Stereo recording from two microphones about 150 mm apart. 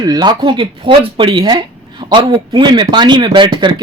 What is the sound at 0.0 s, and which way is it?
Speech, 25° right (ahead or behind).